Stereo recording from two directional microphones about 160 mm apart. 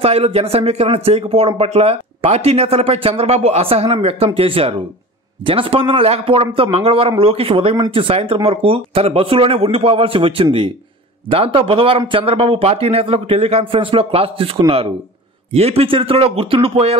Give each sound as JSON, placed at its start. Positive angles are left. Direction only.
{"t": 0.0, "sound": "speech", "side_deg": -40}
{"t": 15.5, "sound": "speech", "side_deg": -40}